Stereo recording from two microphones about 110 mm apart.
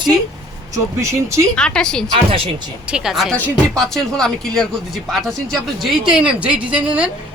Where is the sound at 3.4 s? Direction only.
15° left (ahead or behind).